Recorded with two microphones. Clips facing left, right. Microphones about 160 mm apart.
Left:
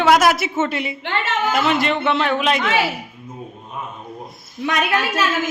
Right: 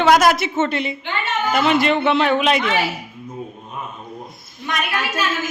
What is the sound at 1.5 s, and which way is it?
A man's voice, centre (ahead or behind).